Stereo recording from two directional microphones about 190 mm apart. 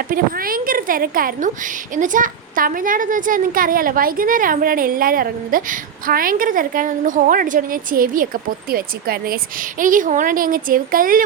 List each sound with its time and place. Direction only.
0.1 s a woman's voice: 50° right (ahead or behind)